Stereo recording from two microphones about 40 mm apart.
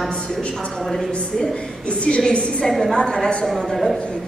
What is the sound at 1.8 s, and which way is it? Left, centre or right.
Speech, left.